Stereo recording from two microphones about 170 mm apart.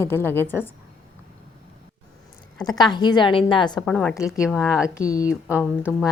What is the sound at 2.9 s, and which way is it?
Speech, 25° left (ahead or behind).